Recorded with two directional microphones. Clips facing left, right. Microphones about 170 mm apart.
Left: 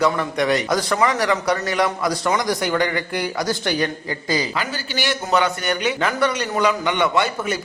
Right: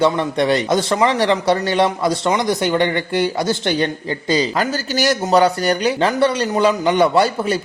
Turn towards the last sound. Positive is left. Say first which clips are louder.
# right 5 dB
turn(degrees=-30)  # may be behind; listen again after turning